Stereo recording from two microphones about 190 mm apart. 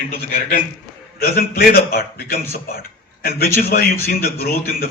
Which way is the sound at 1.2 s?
55° left (ahead or behind).